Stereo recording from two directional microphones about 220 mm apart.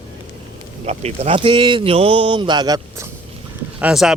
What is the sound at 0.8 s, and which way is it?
Speech, 30° right (ahead or behind).